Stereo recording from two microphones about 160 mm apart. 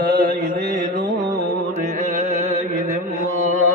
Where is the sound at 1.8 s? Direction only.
55° right (ahead or behind).